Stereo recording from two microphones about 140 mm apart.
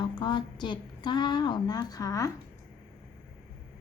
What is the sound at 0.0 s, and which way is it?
A woman's voice, 35° left (ahead or behind).